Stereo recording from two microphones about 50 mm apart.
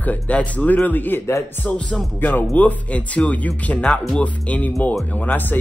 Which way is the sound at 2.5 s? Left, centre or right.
Left.